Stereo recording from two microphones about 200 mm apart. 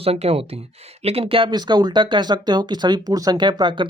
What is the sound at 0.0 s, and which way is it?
Speech, 30° right (ahead or behind).